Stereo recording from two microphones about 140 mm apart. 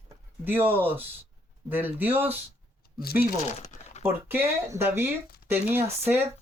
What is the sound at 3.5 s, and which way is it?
Speech, 55° left (ahead or behind).